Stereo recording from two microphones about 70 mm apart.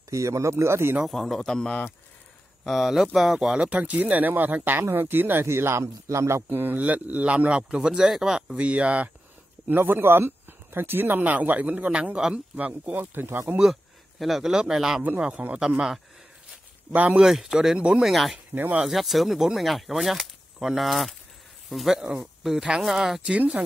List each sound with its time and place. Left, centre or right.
0.1 s speech: right
1.0 s a man's voice: centre
2.6 s speech: centre
9.7 s speech: right
14.2 s speech: centre
17.2 s speech: centre
18.1 s speech: centre
18.5 s speech: right
18.8 s speech: centre
23.3 s speech: centre